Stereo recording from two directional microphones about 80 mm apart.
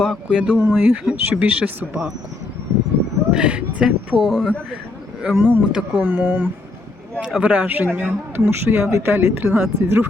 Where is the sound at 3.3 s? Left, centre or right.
Centre.